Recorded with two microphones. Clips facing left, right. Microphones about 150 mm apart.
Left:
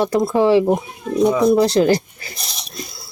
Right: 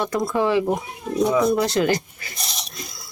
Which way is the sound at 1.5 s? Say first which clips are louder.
Left 6 dB; 35° left (ahead or behind).